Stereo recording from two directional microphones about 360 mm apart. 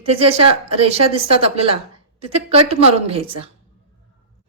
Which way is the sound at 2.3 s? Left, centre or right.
Centre.